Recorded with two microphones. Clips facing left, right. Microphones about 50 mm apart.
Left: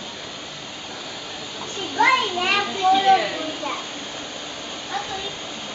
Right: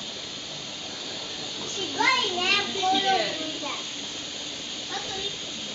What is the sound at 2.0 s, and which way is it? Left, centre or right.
Children playing, left.